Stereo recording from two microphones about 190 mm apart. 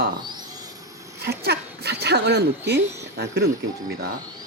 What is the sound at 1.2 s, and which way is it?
Speech, 60° right (ahead or behind).